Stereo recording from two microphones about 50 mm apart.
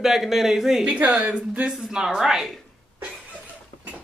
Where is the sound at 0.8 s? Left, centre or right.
Right.